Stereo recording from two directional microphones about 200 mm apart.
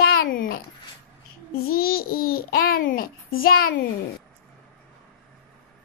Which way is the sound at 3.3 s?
45° left (ahead or behind).